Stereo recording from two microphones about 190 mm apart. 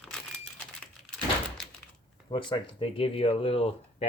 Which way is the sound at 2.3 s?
25° left (ahead or behind).